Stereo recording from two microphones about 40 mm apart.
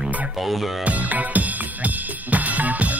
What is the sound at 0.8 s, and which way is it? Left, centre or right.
Music, right.